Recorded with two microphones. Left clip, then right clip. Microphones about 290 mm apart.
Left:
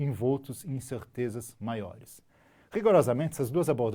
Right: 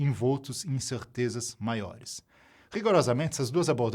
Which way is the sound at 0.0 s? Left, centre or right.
Right.